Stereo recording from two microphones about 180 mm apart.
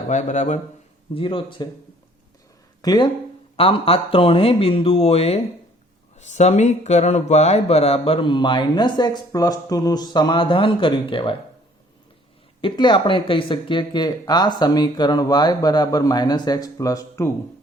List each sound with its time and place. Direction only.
0.1 s speech: 40° left (ahead or behind)
1.1 s speech: 30° left (ahead or behind)
2.8 s speech: 20° left (ahead or behind)
3.6 s speech: 30° left (ahead or behind)
12.6 s speech: 25° left (ahead or behind)